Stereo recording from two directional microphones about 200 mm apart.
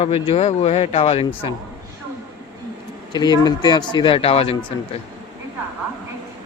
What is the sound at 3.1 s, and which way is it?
Speech, 20° left (ahead or behind).